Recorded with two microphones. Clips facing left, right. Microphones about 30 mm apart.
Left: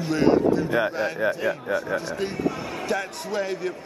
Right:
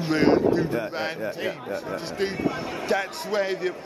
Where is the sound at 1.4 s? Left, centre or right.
Centre.